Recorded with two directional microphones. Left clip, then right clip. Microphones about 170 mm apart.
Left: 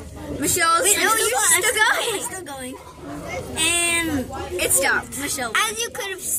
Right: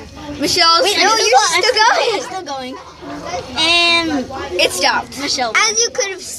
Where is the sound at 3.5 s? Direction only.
10° left (ahead or behind).